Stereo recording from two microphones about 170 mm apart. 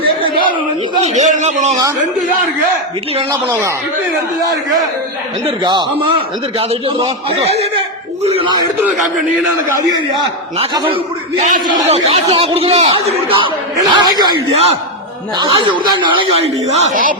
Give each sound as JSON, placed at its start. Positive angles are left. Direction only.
{"t": 1.0, "sound": "a man's voice", "side_deg": -45}
{"t": 3.5, "sound": "a man's voice", "side_deg": -15}
{"t": 5.5, "sound": "a man's voice", "side_deg": -30}
{"t": 10.8, "sound": "a man's voice", "side_deg": -30}
{"t": 15.4, "sound": "speech", "side_deg": -25}
{"t": 16.6, "sound": "a man's voice", "side_deg": -40}